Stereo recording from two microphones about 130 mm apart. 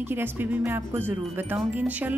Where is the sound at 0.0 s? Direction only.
15° right (ahead or behind).